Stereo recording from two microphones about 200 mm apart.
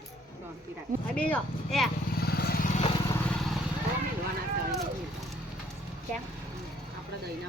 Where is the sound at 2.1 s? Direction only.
50° left (ahead or behind).